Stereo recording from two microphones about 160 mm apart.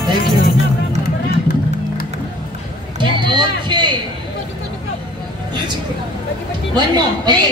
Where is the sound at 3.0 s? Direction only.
30° right (ahead or behind).